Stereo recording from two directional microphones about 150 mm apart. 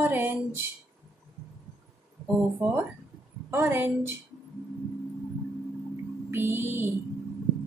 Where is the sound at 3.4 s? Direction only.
15° right (ahead or behind).